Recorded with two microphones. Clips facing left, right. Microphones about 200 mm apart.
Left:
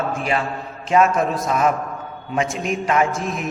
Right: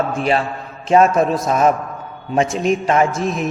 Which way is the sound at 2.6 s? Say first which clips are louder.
Right 3 dB; 30° right (ahead or behind).